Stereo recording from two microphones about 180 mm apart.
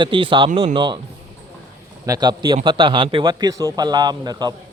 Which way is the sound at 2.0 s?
20° right (ahead or behind).